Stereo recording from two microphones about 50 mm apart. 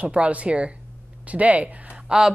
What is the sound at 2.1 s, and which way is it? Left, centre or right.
Speech, centre.